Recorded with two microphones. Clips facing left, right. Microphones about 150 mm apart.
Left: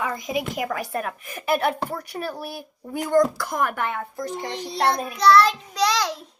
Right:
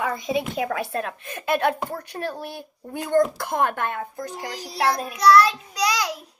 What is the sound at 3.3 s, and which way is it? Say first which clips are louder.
Speech: right 2 dB; 25° right (ahead or behind).